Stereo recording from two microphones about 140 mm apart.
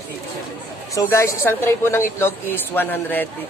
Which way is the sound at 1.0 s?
20° left (ahead or behind).